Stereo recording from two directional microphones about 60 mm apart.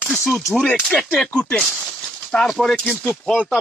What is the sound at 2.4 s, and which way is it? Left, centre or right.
Speech, centre.